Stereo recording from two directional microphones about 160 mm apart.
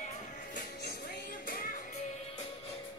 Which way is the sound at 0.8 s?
75° left (ahead or behind).